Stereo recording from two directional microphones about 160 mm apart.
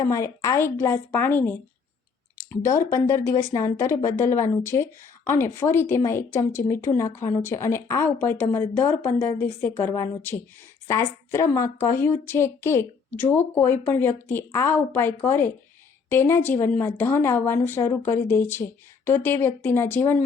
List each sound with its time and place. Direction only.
0.0 s speech: 20° left (ahead or behind)